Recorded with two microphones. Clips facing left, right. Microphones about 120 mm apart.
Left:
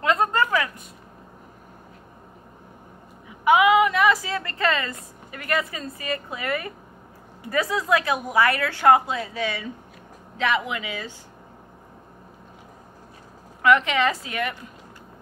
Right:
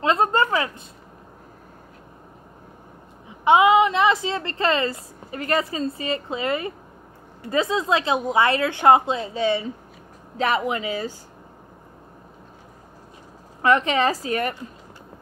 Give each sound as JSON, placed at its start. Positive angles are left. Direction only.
{"t": 0.0, "sound": "a sound", "side_deg": -30}
{"t": 3.3, "sound": "a woman's voice", "side_deg": -30}
{"t": 13.6, "sound": "a woman's voice", "side_deg": -35}